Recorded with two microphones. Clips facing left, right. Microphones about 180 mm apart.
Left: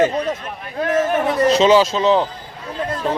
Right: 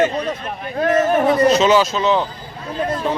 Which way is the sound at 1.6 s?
30° left (ahead or behind).